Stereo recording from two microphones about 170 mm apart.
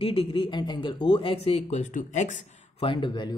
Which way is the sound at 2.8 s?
30° left (ahead or behind).